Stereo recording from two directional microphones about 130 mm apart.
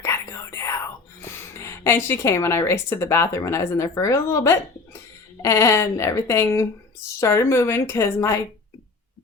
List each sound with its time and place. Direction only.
0.0 s whispering: 20° left (ahead or behind)
1.6 s speech: 20° left (ahead or behind)